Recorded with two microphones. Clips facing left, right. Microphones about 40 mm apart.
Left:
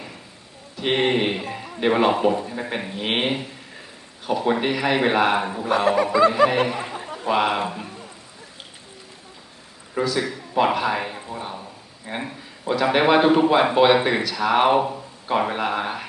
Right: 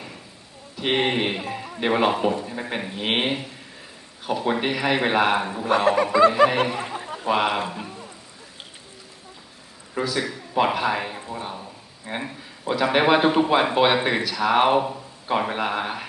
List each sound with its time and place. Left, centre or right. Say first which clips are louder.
0.8 s speech: left 2 dB; centre
5.6 s a sound: right 1 dB; right
6.1 s speech: right 1 dB; right
6.7 s a sound: left 1 dB; centre
7.3 s speech: left 1 dB; centre
9.9 s speech: left 2 dB; centre